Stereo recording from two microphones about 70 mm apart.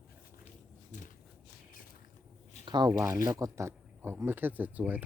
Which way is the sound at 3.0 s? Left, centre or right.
Right.